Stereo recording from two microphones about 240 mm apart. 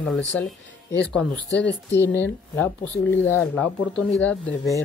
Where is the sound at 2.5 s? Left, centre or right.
Centre.